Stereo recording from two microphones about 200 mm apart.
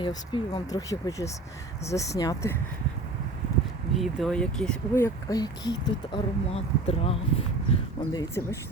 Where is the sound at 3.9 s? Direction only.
Centre (ahead or behind); by 7.2 s 30° left (ahead or behind).